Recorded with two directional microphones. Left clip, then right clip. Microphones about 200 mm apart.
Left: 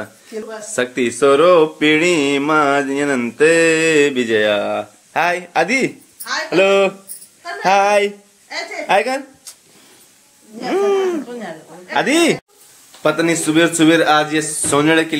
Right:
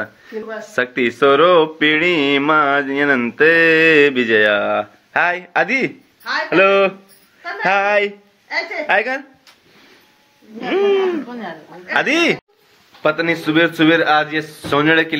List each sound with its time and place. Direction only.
0.6 s speech: 10° left (ahead or behind)
10.7 s speech: 20° left (ahead or behind)